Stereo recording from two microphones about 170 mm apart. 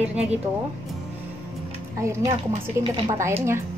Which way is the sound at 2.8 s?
35° right (ahead or behind).